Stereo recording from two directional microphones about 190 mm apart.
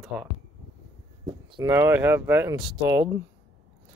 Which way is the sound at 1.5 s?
15° right (ahead or behind).